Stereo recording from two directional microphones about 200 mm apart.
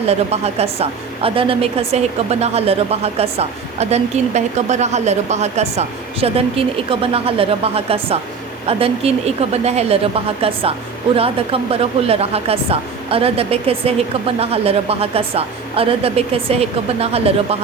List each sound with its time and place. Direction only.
0.0 s a woman's voice: 30° right (ahead or behind)